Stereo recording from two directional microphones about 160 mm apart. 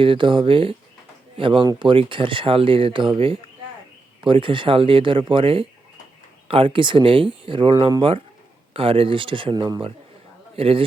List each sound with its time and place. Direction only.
0.0 s speech: 30° right (ahead or behind)